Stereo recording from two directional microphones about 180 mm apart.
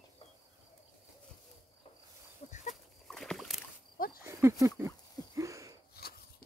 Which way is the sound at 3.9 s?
55° left (ahead or behind).